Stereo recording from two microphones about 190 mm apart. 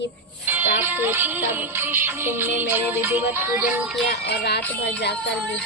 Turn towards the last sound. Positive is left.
turn(degrees=65)  # may be behind; listen again after turning